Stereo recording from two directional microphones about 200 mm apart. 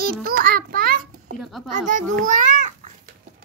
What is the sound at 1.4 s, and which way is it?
Speech, centre (ahead or behind).